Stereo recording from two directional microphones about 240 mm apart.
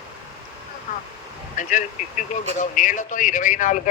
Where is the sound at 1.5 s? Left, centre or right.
Left.